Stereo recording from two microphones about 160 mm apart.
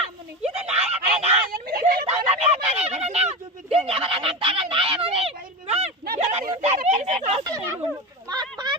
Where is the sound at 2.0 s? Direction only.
40° right (ahead or behind).